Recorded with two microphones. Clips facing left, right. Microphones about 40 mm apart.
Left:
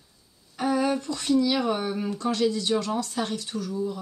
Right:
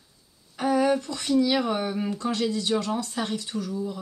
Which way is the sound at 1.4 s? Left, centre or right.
Centre.